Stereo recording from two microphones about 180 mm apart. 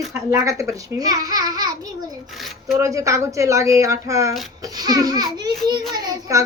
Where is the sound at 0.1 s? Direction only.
15° right (ahead or behind).